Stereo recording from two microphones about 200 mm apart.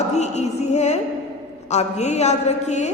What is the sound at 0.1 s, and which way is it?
A woman's voice, 35° left (ahead or behind).